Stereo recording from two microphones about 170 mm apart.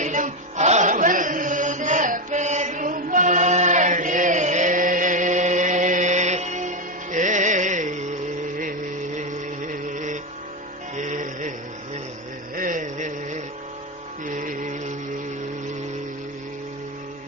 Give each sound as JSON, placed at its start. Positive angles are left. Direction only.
{"t": 0.0, "sound": "music", "side_deg": -45}
{"t": 9.9, "sound": "music", "side_deg": -45}
{"t": 12.5, "sound": "a sound", "side_deg": -50}
{"t": 14.3, "sound": "music", "side_deg": -50}